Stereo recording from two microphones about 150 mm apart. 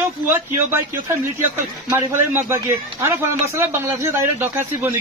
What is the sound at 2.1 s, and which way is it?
A man's voice, 15° right (ahead or behind).